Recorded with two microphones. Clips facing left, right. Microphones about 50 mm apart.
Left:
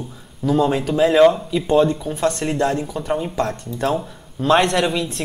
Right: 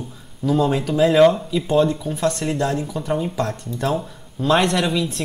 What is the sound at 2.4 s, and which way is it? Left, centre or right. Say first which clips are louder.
Speech: left 2 dB; left.